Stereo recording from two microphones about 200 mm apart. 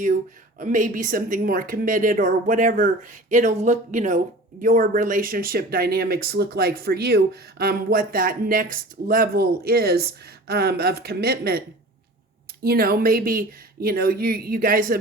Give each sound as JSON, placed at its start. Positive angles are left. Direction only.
{"t": 0.6, "sound": "speech", "side_deg": -40}
{"t": 12.6, "sound": "speech", "side_deg": -50}